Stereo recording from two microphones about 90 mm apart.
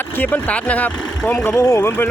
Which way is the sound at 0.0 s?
20° left (ahead or behind).